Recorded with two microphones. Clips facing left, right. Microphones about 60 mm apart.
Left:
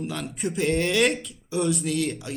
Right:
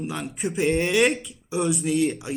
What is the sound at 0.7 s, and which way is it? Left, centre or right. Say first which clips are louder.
Speech: right 1 dB; centre.